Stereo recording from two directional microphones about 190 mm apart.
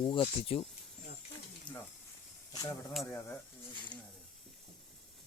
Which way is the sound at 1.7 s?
25° left (ahead or behind).